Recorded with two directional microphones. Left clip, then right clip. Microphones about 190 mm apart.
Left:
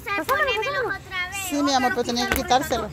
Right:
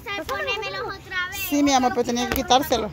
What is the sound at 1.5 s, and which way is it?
Speech, 25° right (ahead or behind).